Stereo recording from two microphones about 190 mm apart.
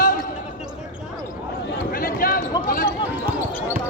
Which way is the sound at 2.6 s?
45° left (ahead or behind).